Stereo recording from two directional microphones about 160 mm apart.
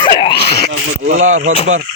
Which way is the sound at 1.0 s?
50° right (ahead or behind).